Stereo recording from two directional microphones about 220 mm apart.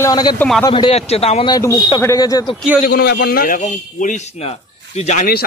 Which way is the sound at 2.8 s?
45° left (ahead or behind).